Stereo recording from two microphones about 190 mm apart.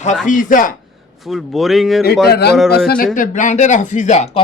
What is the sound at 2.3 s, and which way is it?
Speech, 60° left (ahead or behind).